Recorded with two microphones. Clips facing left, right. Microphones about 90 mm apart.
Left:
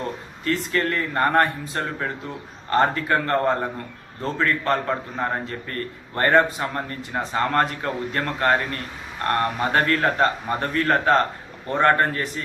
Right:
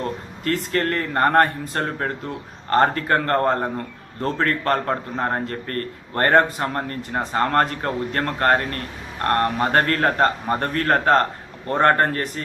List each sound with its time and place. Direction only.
0.4 s a man's voice: 50° right (ahead or behind)